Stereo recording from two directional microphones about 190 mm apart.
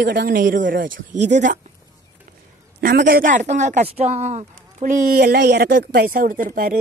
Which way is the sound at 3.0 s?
45° right (ahead or behind).